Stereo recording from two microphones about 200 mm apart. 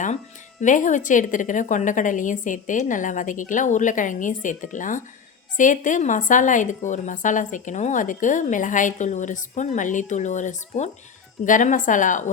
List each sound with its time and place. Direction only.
0.6 s a woman's voice: 40° left (ahead or behind)